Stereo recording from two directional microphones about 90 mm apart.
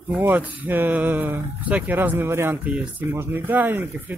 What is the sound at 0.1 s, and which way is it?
Speech, 20° right (ahead or behind).